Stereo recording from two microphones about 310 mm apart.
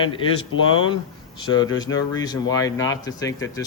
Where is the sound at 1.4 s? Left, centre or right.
Centre.